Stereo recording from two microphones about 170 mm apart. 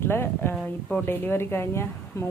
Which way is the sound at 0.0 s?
15° left (ahead or behind).